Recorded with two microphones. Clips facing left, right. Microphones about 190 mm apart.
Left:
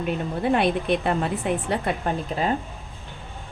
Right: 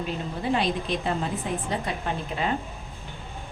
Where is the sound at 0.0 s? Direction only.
55° left (ahead or behind).